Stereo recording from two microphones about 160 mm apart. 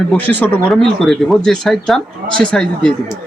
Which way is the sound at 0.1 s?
10° left (ahead or behind).